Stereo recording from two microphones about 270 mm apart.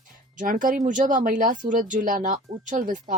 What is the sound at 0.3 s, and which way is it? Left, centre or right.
Speech, right.